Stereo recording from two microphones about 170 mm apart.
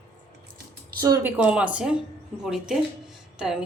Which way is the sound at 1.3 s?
10° right (ahead or behind).